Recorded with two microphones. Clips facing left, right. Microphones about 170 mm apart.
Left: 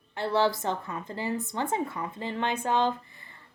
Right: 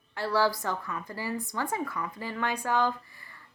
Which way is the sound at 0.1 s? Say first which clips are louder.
Left 1 dB; 20° left (ahead or behind).